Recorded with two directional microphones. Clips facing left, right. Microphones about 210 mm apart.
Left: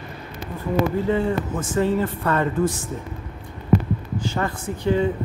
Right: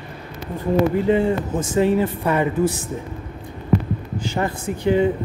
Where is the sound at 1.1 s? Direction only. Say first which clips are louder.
Right 3 dB; 15° right (ahead or behind).